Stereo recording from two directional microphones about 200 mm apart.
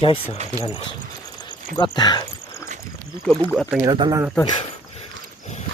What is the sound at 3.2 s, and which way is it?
Speech, 5° left (ahead or behind).